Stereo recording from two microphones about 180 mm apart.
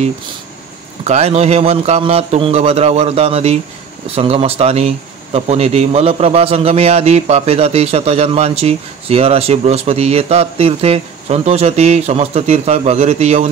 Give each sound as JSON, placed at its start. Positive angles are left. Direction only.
{"t": 1.0, "sound": "speech", "side_deg": -35}